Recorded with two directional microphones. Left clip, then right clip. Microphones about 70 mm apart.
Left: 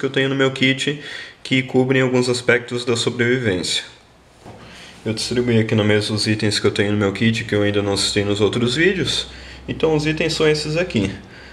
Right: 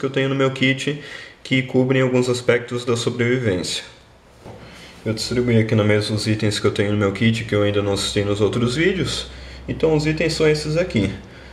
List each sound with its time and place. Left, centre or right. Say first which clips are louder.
0.0 s speech: left 2 dB; left
5.0 s speech: left 1 dB; centre